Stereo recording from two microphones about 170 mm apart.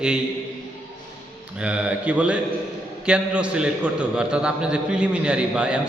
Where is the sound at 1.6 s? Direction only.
5° right (ahead or behind).